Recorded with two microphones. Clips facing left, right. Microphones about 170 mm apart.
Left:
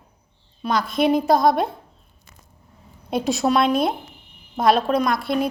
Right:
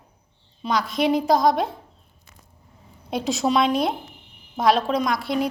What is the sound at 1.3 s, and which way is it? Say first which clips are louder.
Speech: left 2 dB; 55° left (ahead or behind).